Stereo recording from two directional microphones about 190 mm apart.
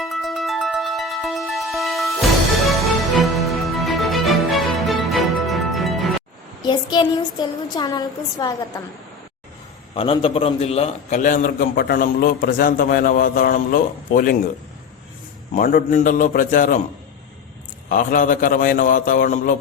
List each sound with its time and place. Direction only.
0.0 s music: centre (ahead or behind)
3.2 s music: centre (ahead or behind)
6.6 s a sound: 25° left (ahead or behind)
8.4 s a woman's voice: 20° left (ahead or behind)
9.9 s a man's voice: 30° left (ahead or behind); by 14.3 s 50° left (ahead or behind)
15.5 s a man's voice: 45° left (ahead or behind)
17.8 s a man's voice: 45° left (ahead or behind)